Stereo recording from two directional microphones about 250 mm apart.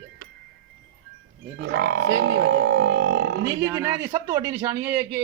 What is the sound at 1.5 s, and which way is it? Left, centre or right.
Speech, right.